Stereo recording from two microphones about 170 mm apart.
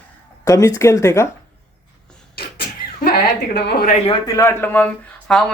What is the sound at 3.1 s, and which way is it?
Speech, 70° left (ahead or behind).